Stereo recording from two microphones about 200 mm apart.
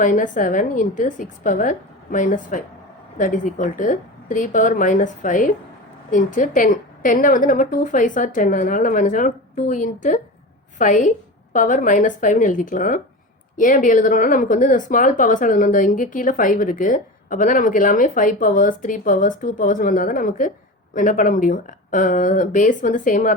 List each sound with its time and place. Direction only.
0.0 s speech: 40° left (ahead or behind)